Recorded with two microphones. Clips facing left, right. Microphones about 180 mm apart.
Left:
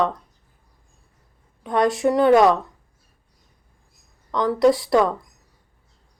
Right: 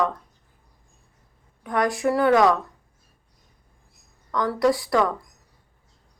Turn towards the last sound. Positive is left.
turn(degrees=25)  # may be behind; listen again after turning